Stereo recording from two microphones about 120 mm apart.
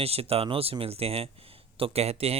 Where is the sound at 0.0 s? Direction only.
55° right (ahead or behind).